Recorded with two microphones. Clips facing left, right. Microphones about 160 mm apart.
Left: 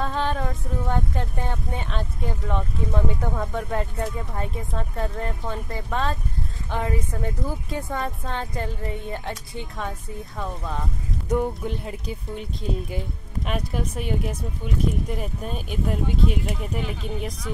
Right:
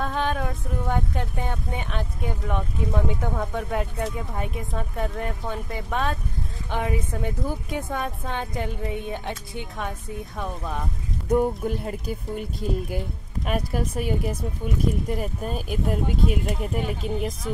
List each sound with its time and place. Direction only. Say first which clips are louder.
0.0 s speech: even; 5° right (ahead or behind)
7.0 s speech: even; centre (ahead or behind)
7.2 s speech: right 1 dB; 10° right (ahead or behind)
8.5 s speech: right 1 dB; 15° right (ahead or behind)